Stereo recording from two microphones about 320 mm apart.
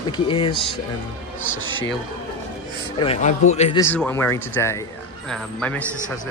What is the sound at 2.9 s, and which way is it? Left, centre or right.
Speech, centre.